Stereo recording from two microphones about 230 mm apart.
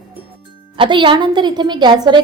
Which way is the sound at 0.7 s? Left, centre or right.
Right.